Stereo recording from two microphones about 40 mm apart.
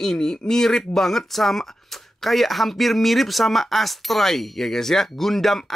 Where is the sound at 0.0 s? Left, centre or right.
Centre.